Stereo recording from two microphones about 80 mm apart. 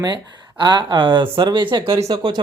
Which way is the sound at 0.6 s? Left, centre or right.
Right.